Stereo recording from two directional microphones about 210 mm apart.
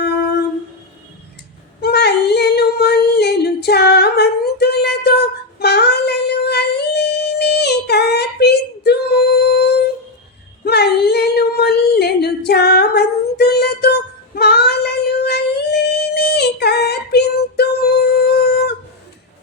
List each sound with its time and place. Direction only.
1.8 s female singing: 50° left (ahead or behind)
10.6 s a sound: 50° left (ahead or behind)
14.3 s child singing: 50° left (ahead or behind)